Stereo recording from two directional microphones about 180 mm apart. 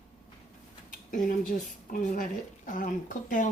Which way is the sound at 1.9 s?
45° left (ahead or behind).